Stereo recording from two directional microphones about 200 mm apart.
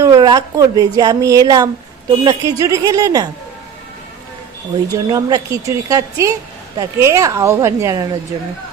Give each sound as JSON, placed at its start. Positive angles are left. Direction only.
{"t": 0.0, "sound": "a woman's voice", "side_deg": -20}
{"t": 5.1, "sound": "a woman's voice", "side_deg": -15}